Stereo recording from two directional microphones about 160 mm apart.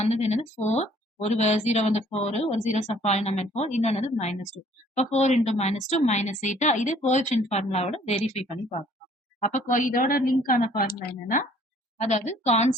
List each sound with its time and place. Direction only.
0.0 s a woman's voice: 45° left (ahead or behind); by 11.4 s 60° left (ahead or behind)
11.9 s a woman's voice: 45° left (ahead or behind)